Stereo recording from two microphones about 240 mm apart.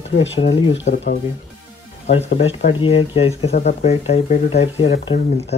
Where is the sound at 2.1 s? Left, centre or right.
Left.